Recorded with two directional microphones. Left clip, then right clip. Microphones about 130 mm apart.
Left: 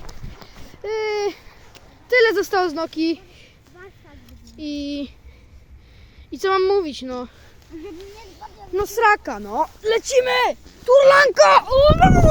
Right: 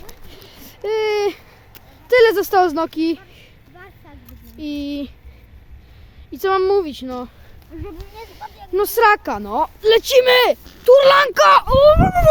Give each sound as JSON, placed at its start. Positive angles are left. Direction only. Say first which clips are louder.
{"t": 0.7, "sound": "a sound", "louder": "right 4 dB", "side_deg": -15}
{"t": 3.0, "sound": "a sound", "louder": "right 2 dB", "side_deg": 0}
{"t": 4.5, "sound": "speech", "louder": "right 2 dB", "side_deg": 0}
{"t": 6.3, "sound": "speech", "louder": "right 2 dB", "side_deg": 15}
{"t": 7.7, "sound": "speech", "louder": "right 1 dB", "side_deg": -35}
{"t": 8.7, "sound": "speech", "louder": "right 3 dB", "side_deg": -15}
{"t": 10.2, "sound": "speech", "louder": "right 6 dB", "side_deg": -45}
{"t": 11.2, "sound": "speech", "louder": "right 1 dB", "side_deg": -15}
{"t": 11.9, "sound": "a child's voice", "louder": "even", "side_deg": 25}